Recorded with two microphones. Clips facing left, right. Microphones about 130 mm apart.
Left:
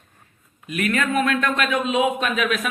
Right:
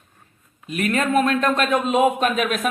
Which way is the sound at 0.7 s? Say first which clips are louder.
Right 2 dB; 35° right (ahead or behind).